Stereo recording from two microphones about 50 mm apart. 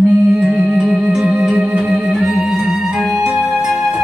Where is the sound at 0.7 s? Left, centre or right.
Centre.